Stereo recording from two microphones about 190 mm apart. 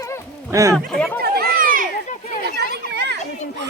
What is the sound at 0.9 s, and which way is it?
Speech, 5° left (ahead or behind).